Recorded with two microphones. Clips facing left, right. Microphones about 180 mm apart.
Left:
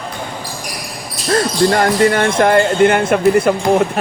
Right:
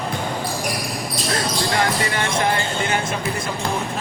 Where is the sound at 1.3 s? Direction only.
50° left (ahead or behind).